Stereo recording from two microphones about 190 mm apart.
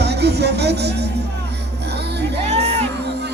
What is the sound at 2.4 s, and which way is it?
Music, 35° right (ahead or behind).